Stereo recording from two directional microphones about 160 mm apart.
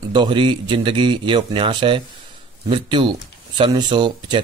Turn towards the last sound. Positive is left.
turn(degrees=-30)  # may be behind; listen again after turning